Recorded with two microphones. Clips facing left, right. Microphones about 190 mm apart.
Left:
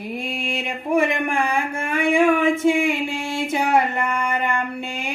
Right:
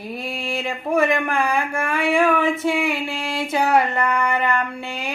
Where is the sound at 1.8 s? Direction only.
20° left (ahead or behind).